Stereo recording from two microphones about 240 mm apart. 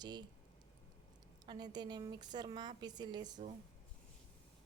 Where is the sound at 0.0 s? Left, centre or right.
Centre.